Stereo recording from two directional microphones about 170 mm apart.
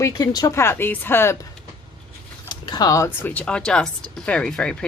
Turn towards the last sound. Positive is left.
turn(degrees=5)  # may be behind; listen again after turning